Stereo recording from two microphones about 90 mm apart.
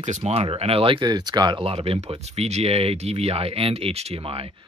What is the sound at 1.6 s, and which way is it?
Speech, 90° right.